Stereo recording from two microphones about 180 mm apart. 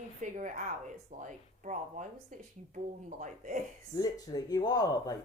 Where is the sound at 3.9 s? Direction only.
20° left (ahead or behind).